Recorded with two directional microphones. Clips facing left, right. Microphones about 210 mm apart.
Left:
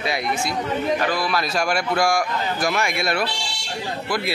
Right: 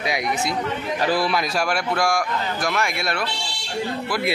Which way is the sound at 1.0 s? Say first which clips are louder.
Right 2 dB; 30° right (ahead or behind).